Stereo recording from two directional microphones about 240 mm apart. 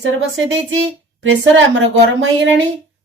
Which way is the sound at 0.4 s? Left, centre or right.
Right.